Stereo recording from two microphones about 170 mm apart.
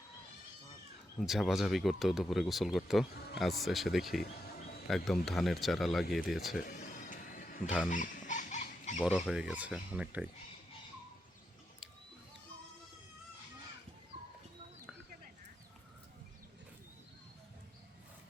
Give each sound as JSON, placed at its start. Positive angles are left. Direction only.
{"t": 1.2, "sound": "speech", "side_deg": 0}
{"t": 6.6, "sound": "a sound", "side_deg": 55}
{"t": 7.9, "sound": "dog", "side_deg": 50}
{"t": 9.0, "sound": "speech", "side_deg": -5}